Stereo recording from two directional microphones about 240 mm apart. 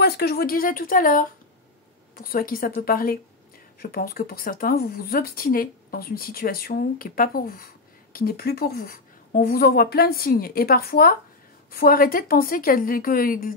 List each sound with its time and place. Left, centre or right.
0.0 s speech: left